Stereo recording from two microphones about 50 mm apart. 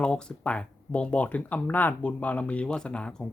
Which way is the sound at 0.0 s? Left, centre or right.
Centre.